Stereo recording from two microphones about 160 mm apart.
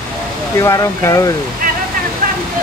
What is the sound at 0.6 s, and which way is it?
Speech, 20° left (ahead or behind).